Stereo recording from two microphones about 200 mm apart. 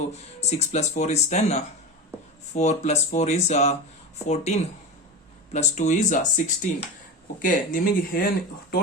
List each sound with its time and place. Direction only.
0.1 s speech: 35° left (ahead or behind)